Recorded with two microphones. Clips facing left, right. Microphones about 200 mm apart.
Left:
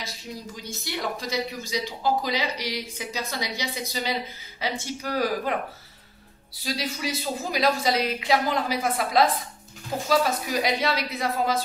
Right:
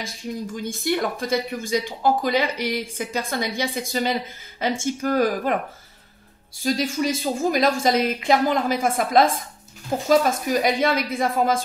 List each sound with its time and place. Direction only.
0.6 s speech: 50° right (ahead or behind)